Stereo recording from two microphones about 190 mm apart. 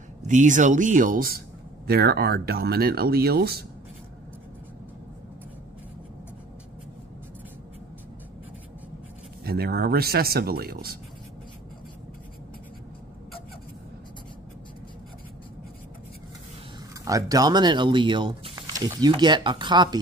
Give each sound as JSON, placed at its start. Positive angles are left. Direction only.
{"t": 0.3, "sound": "speech", "side_deg": -40}
{"t": 9.4, "sound": "speech", "side_deg": -55}
{"t": 17.0, "sound": "speech", "side_deg": -20}